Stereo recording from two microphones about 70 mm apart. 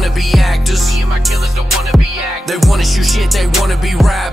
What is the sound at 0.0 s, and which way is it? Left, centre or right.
Music, centre.